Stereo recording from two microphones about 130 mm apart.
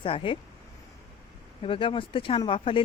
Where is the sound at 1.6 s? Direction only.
45° left (ahead or behind).